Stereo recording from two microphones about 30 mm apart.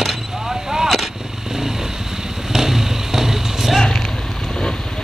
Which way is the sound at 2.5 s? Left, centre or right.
Centre.